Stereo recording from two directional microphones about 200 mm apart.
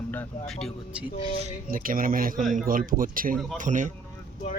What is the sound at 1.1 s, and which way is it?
Speech, 35° left (ahead or behind).